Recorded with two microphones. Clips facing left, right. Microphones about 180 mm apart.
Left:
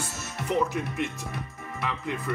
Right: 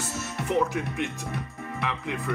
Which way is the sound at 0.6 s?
Centre (ahead or behind).